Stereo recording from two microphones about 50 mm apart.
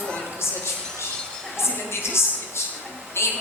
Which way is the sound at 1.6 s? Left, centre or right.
Left.